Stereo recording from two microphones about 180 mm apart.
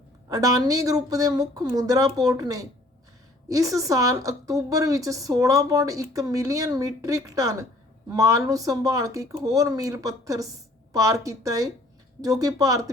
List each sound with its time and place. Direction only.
0.3 s a woman's voice: 20° right (ahead or behind)